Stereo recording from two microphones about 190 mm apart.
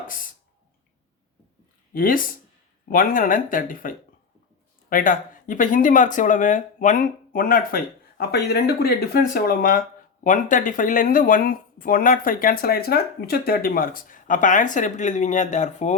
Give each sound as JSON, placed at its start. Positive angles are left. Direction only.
{"t": 1.9, "sound": "speech", "side_deg": 45}